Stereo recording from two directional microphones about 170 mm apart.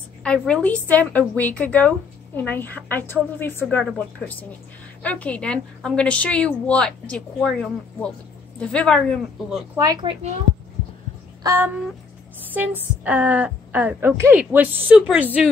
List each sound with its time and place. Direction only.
0.2 s a woman's voice: 5° left (ahead or behind)
9.8 s speech: 20° right (ahead or behind)
11.4 s speech: 15° right (ahead or behind)
13.0 s speech: 10° right (ahead or behind)